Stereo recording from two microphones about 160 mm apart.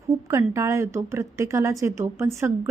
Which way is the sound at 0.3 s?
15° right (ahead or behind).